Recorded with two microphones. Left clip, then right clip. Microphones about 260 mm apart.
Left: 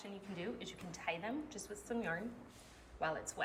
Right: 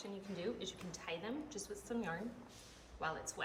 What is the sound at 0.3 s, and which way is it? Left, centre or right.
A woman's voice, centre.